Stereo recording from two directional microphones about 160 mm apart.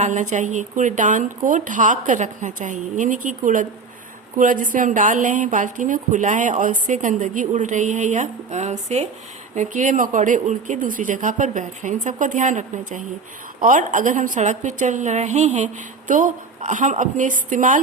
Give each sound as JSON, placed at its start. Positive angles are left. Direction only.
{"t": 0.0, "sound": "a woman's voice", "side_deg": -50}